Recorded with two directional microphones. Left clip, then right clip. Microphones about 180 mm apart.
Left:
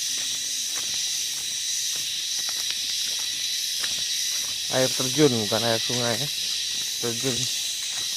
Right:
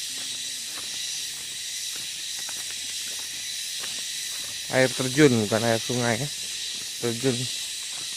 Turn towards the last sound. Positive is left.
turn(degrees=-40)  # may be behind; listen again after turning